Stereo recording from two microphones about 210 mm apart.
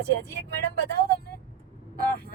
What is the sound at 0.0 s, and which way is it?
Speech, 50° right (ahead or behind).